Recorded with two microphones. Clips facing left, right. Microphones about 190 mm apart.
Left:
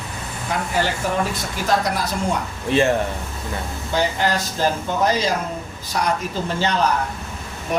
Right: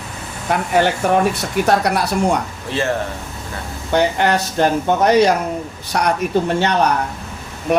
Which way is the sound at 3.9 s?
65° right (ahead or behind).